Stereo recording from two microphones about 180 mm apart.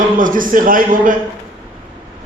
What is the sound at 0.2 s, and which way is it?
Speech, 50° right (ahead or behind).